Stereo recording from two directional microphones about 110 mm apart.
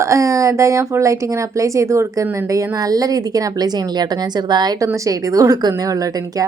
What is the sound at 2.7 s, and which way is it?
A woman's voice, 35° right (ahead or behind).